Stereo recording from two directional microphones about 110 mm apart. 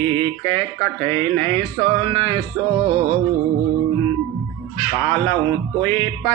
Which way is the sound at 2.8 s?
45° right (ahead or behind).